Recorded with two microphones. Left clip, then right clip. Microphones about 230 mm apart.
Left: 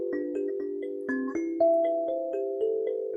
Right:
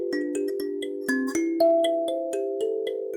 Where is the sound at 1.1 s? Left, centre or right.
Right.